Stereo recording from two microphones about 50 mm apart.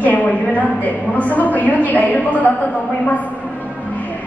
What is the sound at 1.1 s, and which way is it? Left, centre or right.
A woman's voice, left.